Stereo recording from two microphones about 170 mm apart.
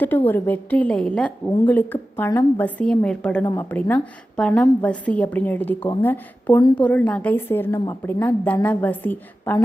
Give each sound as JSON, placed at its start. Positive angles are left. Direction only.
{"t": 0.0, "sound": "a woman's voice", "side_deg": 10}
{"t": 6.6, "sound": "a woman's voice", "side_deg": 25}
{"t": 6.8, "sound": "a woman's voice", "side_deg": 10}